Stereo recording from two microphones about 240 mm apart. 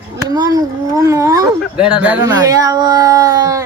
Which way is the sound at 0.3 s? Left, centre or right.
Centre.